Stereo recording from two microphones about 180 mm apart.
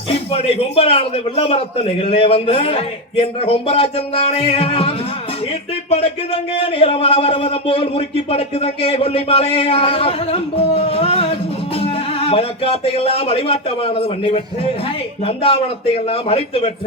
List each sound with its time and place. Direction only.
0.1 s speech: 35° left (ahead or behind)